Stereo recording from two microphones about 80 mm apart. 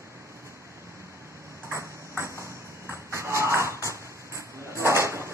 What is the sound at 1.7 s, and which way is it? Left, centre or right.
Ping, right.